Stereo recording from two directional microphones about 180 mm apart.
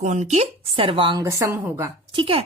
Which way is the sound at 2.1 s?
30° right (ahead or behind).